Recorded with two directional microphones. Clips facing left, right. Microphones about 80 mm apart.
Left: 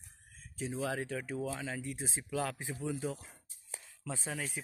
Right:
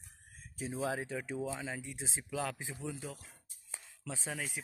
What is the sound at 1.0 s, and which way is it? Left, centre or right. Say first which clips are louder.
Speech: left 1 dB; centre.